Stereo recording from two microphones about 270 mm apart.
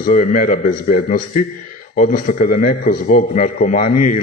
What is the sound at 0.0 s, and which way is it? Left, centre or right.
A man's voice, left.